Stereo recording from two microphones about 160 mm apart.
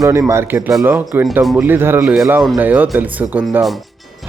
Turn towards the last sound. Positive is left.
turn(degrees=-10)  # may be behind; listen again after turning